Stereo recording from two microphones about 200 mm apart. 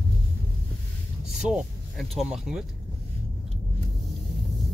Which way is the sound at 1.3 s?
Centre (ahead or behind).